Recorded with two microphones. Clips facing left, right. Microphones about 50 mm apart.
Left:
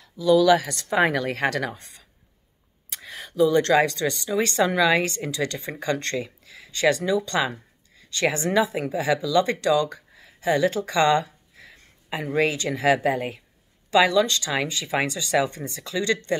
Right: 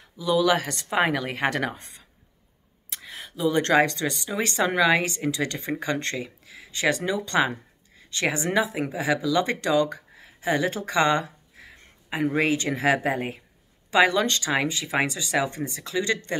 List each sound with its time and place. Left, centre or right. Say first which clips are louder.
0.2 s speech: left 5 dB; centre
0.6 s speech: right 1 dB; right
0.8 s speech: left 2 dB; centre
1.6 s speech: right 1 dB; right
2.9 s a sound: left 2 dB; centre
3.6 s speech: left 1 dB; right
4.0 s speech: left 3 dB; right
13.8 s speech: left 1 dB; right
14.5 s speech: right 1 dB; centre